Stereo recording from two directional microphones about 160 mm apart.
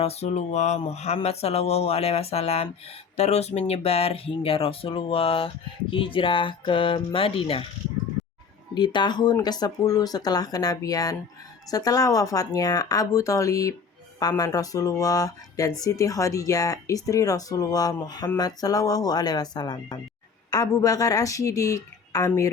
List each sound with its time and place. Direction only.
0.0 s speech: 40° left (ahead or behind)
8.7 s speech: 30° left (ahead or behind)